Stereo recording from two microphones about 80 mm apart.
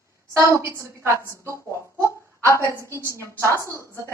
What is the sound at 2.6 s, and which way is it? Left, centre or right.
A woman's voice, right.